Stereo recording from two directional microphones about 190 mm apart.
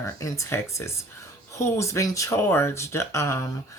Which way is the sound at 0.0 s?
15° left (ahead or behind).